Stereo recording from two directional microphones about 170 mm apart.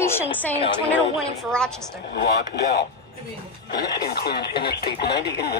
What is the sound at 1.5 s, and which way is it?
Speech, 5° left (ahead or behind).